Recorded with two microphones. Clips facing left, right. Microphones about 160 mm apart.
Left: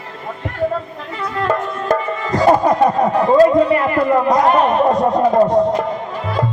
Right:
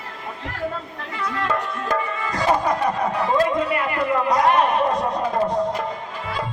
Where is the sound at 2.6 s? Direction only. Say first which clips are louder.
Left 8 dB; 35° left (ahead or behind).